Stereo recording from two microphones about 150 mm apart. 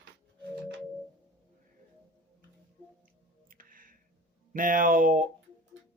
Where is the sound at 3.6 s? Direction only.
70° right (ahead or behind).